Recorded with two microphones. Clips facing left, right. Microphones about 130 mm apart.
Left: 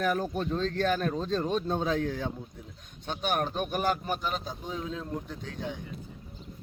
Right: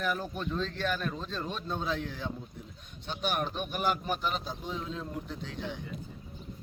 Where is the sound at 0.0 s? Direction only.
45° left (ahead or behind).